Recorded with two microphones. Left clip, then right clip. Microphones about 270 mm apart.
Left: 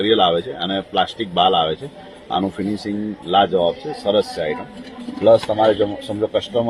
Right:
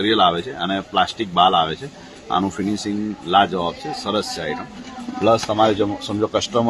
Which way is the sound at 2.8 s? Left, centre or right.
Centre.